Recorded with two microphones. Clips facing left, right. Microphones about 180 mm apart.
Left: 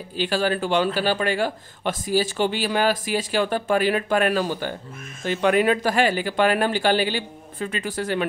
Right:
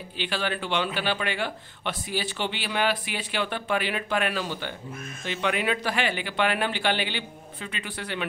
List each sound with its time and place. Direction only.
0.2 s a man's voice: 40° left (ahead or behind)